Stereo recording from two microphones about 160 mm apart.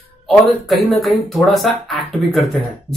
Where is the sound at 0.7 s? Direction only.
Centre (ahead or behind).